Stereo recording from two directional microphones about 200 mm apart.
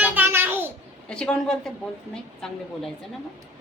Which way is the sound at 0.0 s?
10° right (ahead or behind).